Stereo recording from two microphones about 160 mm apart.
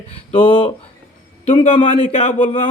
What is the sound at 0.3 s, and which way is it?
A man's voice, 30° left (ahead or behind).